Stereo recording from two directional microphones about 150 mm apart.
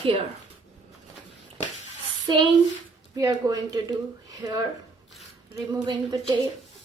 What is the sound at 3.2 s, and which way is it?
A woman's voice, 25° right (ahead or behind).